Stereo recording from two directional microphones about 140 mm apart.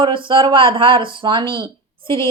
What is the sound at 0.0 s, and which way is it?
A woman's voice, 40° right (ahead or behind).